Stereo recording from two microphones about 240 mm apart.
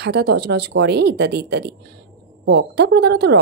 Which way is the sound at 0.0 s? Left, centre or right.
Right.